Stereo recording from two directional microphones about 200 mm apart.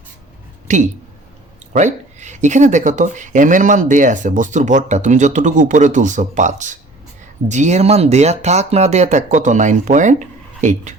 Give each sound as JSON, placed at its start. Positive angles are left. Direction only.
{"t": 0.7, "sound": "speech", "side_deg": -40}